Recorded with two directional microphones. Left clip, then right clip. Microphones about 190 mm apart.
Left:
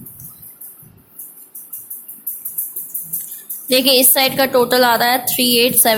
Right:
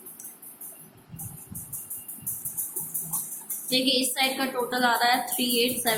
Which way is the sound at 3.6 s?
60° left (ahead or behind).